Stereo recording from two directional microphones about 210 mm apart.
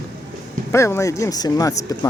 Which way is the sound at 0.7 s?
15° left (ahead or behind).